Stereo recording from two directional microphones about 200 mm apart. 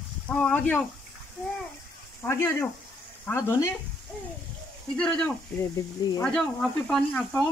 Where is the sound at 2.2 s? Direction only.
15° left (ahead or behind).